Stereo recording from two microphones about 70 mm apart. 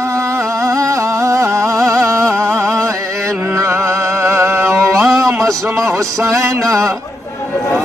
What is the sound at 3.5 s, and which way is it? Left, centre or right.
Music, right.